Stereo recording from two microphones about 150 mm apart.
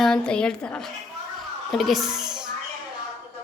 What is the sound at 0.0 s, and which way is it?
A woman's voice, 5° left (ahead or behind).